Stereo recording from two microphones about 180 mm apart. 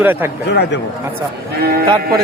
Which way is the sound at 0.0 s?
10° right (ahead or behind).